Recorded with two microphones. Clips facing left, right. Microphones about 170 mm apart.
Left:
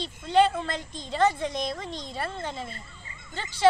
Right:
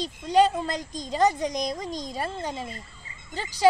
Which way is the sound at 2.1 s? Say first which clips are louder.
Even; 15° right (ahead or behind).